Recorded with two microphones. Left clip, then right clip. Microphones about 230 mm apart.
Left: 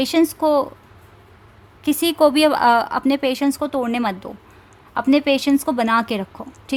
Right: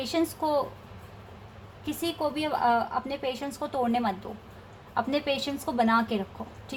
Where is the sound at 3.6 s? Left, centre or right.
Left.